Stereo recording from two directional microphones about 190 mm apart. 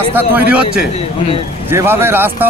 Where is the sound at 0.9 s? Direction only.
30° left (ahead or behind).